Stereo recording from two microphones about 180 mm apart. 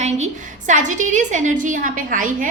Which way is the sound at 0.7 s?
45° right (ahead or behind).